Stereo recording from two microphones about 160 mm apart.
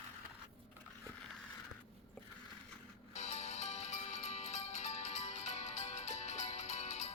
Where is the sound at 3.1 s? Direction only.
45° left (ahead or behind).